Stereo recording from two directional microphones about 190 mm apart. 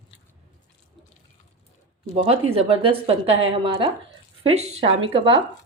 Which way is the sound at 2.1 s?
30° right (ahead or behind).